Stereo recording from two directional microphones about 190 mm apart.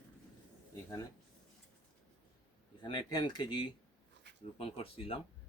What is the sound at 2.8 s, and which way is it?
Speech, 25° left (ahead or behind).